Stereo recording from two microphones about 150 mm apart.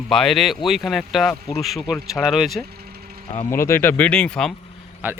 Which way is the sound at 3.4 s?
15° left (ahead or behind).